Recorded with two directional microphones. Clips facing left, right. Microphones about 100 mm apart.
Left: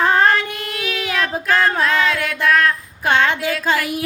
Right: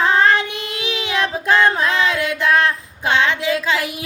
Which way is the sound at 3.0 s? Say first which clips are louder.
Left 1 dB; 45° left (ahead or behind).